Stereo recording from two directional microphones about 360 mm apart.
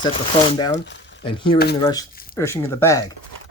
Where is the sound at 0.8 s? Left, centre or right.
Left.